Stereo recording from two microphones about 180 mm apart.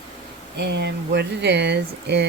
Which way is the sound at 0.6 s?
70° right (ahead or behind).